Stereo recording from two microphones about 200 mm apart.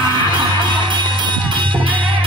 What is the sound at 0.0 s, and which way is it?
Music, 25° right (ahead or behind).